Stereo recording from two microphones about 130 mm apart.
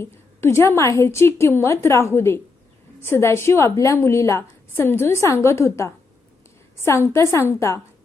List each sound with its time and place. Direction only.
0.0 s a woman's voice: 20° left (ahead or behind)